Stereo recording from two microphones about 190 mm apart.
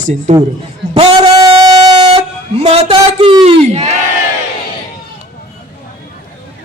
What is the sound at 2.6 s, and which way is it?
A man's voice, 35° right (ahead or behind).